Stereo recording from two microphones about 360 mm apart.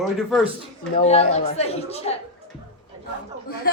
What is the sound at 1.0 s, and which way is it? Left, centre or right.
Speech, centre.